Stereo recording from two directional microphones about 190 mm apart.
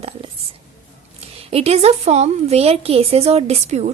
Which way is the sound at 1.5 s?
30° right (ahead or behind).